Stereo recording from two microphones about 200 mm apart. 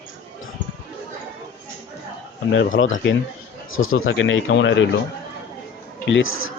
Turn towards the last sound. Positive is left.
turn(degrees=80)